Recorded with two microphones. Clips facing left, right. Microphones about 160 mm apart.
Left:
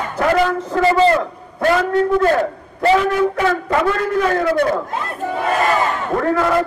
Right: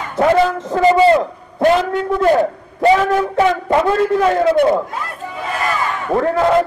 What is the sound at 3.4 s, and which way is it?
A man's voice, 25° right (ahead or behind).